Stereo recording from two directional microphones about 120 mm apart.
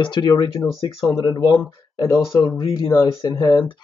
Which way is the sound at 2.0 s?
25° left (ahead or behind).